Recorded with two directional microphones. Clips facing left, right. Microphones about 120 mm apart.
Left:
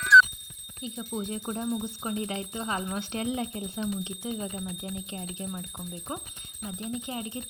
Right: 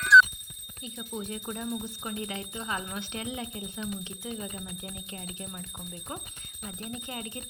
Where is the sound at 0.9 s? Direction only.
30° left (ahead or behind).